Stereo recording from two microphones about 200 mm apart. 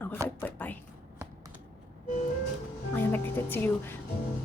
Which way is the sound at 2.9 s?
10° left (ahead or behind).